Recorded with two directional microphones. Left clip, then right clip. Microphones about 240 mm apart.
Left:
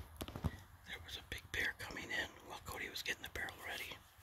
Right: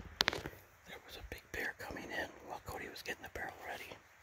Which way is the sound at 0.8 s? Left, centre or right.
Centre.